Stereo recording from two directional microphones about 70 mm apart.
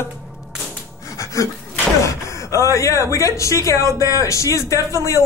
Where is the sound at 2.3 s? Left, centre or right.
Left.